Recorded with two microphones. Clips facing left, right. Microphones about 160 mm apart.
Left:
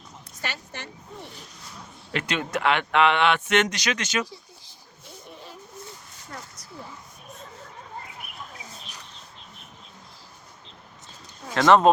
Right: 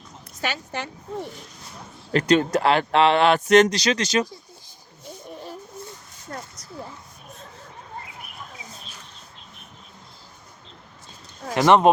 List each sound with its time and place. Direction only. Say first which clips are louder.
0.5 s speech: right 8 dB; 90° right
2.1 s speech: right 9 dB; 40° right (ahead or behind)
11.5 s speech: right 1 dB; 15° right (ahead or behind)